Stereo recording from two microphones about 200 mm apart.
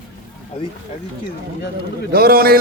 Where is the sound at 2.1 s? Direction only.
50° right (ahead or behind).